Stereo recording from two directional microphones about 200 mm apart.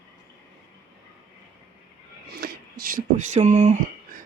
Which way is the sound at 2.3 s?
50° right (ahead or behind).